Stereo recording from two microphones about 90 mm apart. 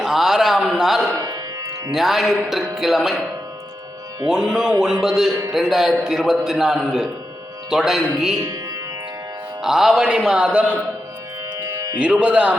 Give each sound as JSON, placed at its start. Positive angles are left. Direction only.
{"t": 0.0, "sound": "a sound", "side_deg": -5}
{"t": 1.1, "sound": "music", "side_deg": -45}
{"t": 1.9, "sound": "a man's voice", "side_deg": -5}
{"t": 4.3, "sound": "a man's voice", "side_deg": -5}
{"t": 9.6, "sound": "speech", "side_deg": -5}
{"t": 11.6, "sound": "music", "side_deg": -40}
{"t": 11.9, "sound": "speech", "side_deg": -15}